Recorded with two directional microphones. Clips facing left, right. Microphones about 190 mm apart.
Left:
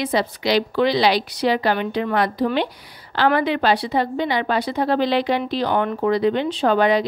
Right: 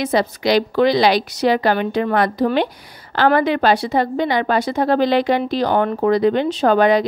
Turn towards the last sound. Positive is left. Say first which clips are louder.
# right 3 dB
turn(degrees=-45)  # may be behind; listen again after turning